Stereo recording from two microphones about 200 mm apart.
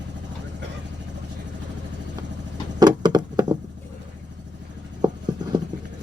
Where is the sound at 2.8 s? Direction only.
20° right (ahead or behind).